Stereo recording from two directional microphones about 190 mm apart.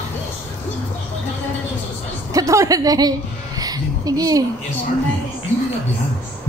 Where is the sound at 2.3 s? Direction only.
15° right (ahead or behind).